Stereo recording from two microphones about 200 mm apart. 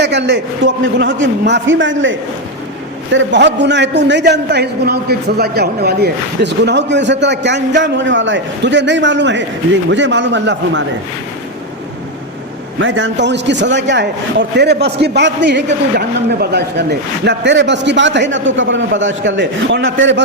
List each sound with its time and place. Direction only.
0.0 s a man's voice: 60° right (ahead or behind)
12.8 s a man's voice: 70° right (ahead or behind)